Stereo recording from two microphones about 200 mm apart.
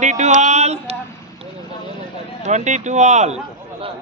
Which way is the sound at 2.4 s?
35° right (ahead or behind).